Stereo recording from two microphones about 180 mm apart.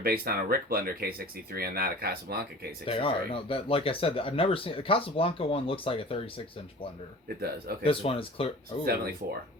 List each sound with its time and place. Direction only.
0.0 s speech: 55° right (ahead or behind)
2.8 s speech: 30° left (ahead or behind)
7.3 s speech: 60° right (ahead or behind)
7.9 s speech: 30° left (ahead or behind)
8.8 s speech: 55° right (ahead or behind)